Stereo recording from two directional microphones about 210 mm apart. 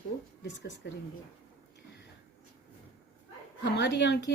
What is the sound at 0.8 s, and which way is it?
Speech, 55° left (ahead or behind).